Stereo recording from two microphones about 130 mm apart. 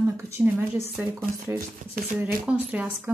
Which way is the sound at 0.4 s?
10° right (ahead or behind).